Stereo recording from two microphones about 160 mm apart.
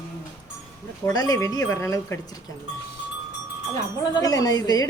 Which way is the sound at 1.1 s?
25° left (ahead or behind).